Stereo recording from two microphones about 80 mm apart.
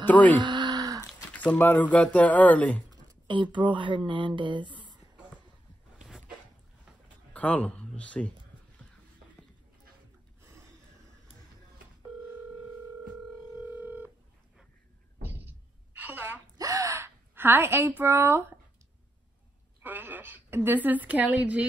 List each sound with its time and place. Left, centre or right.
0.0 s speech: centre
0.4 s a sound: right
1.4 s speech: left
3.5 s speech: right
7.3 s speech: centre
13.7 s telephone: right
15.2 s a sound: right
16.5 s gasp: right
17.4 s speech: right
19.8 s a woman's voice: right